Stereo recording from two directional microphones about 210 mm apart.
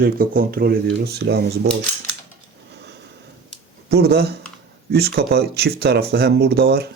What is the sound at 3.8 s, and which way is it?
Speech, 50° right (ahead or behind).